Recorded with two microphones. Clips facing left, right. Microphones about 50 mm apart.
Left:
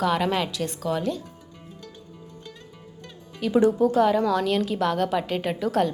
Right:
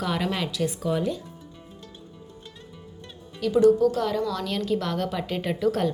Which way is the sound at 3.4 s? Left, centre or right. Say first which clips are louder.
Right 1 dB; left.